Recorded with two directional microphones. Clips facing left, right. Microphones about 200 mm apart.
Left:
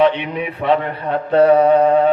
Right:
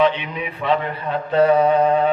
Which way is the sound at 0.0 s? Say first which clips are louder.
Left 3 dB; 60° left (ahead or behind).